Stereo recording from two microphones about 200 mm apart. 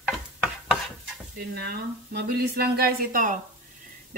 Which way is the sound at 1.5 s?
55° right (ahead or behind).